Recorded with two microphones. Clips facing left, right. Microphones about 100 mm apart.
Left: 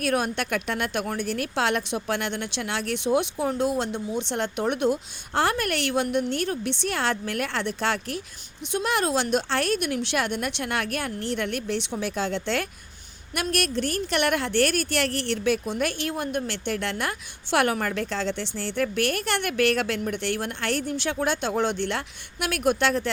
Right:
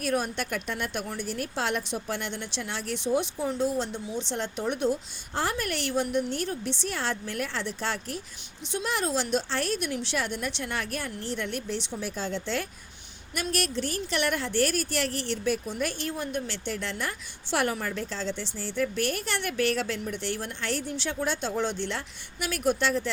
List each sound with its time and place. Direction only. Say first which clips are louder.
0.0 s speech: left 3 dB; 70° left (ahead or behind)
13.3 s a woman's voice: left 3 dB; 60° left (ahead or behind)